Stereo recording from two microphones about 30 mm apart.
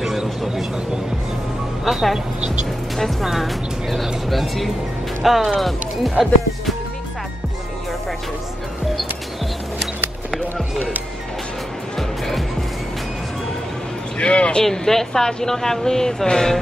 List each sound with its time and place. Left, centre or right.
1.9 s speech: centre
3.3 s speech: centre
14.1 s a man's voice: left
14.6 s a woman's voice: centre